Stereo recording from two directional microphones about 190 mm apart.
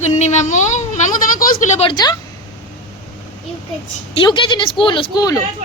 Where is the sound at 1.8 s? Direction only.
20° left (ahead or behind).